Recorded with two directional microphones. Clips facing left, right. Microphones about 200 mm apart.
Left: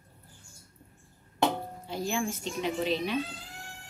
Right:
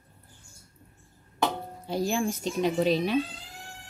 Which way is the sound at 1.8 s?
40° right (ahead or behind).